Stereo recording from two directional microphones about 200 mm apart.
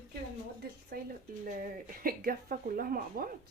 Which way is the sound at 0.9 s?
45° right (ahead or behind).